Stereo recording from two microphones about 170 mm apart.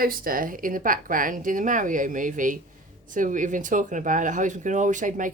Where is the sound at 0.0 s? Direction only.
60° right (ahead or behind).